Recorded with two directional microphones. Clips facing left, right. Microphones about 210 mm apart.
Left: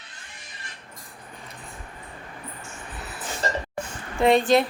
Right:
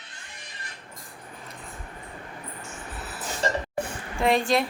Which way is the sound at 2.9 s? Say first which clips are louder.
Left 1 dB; centre (ahead or behind).